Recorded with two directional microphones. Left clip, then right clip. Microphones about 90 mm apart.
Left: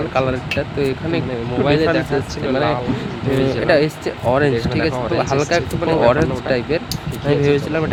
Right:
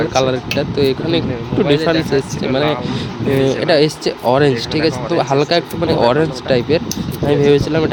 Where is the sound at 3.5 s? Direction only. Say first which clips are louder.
Right 2 dB; 70° right (ahead or behind).